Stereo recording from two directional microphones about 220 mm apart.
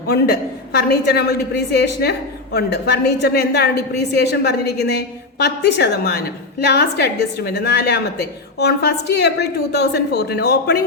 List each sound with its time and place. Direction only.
0.1 s a woman's voice: 45° left (ahead or behind)